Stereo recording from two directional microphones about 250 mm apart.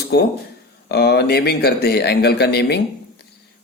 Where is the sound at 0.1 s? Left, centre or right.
Left.